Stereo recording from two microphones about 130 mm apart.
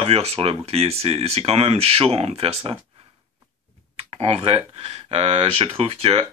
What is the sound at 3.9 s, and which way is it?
Speech, 50° right (ahead or behind).